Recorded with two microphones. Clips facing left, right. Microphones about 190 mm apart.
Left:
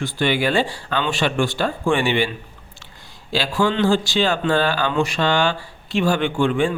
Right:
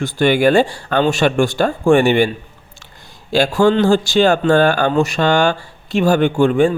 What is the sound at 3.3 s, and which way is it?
Speech, 45° right (ahead or behind).